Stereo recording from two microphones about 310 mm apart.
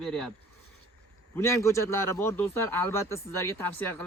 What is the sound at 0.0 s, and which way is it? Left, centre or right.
Speech, centre.